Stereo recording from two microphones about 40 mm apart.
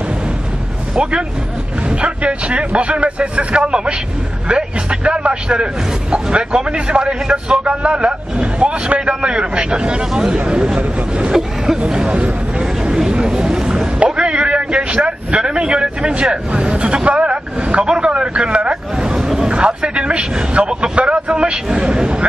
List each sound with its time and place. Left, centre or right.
1.9 s a man's voice: right
11.3 s speech: centre
11.8 s speech: right
12.3 s vehicle: right
14.3 s speech: right
19.1 s a sound: centre
19.5 s a man's voice: right